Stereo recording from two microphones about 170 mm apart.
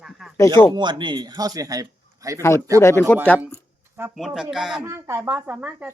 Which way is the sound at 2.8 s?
15° left (ahead or behind).